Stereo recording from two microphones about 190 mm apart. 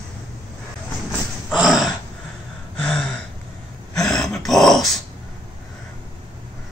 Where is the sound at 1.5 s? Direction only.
Centre (ahead or behind).